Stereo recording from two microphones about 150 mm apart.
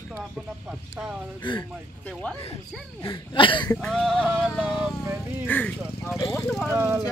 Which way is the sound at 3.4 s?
30° left (ahead or behind).